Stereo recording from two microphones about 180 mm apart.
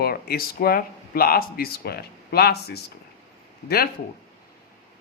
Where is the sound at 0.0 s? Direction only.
60° left (ahead or behind).